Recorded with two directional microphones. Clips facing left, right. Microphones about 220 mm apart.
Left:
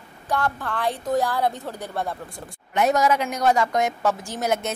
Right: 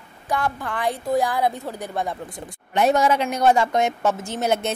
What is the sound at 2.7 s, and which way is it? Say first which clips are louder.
A woman's voice: right 2 dB; 30° right (ahead or behind).